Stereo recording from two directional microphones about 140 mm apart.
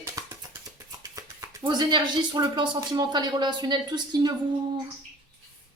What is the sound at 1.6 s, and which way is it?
Speech, 35° right (ahead or behind).